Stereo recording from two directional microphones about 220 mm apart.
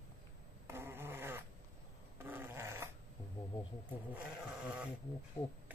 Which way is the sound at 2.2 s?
10° right (ahead or behind).